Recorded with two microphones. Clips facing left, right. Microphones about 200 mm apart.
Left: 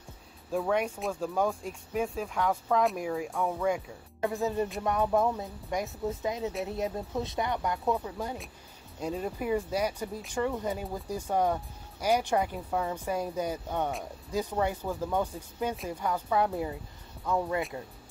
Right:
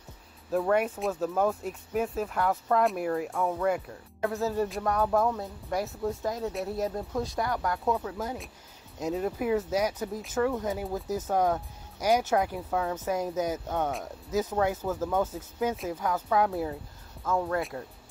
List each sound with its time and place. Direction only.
0.5 s speech: centre (ahead or behind)
5.0 s speech: 20° left (ahead or behind)
5.9 s speech: centre (ahead or behind)
17.2 s speech: 15° left (ahead or behind)
17.6 s speech: centre (ahead or behind)